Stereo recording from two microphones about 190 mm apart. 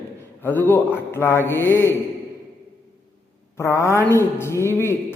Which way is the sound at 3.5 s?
15° left (ahead or behind).